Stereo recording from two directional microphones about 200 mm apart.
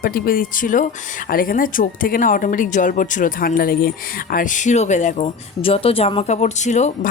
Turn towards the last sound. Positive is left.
turn(degrees=35)  # may be behind; listen again after turning